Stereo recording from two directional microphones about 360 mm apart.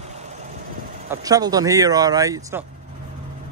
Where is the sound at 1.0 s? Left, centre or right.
Centre.